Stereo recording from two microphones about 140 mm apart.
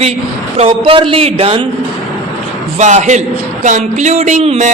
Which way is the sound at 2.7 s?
55° right (ahead or behind).